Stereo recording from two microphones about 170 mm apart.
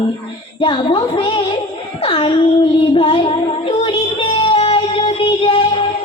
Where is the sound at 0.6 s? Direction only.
30° left (ahead or behind).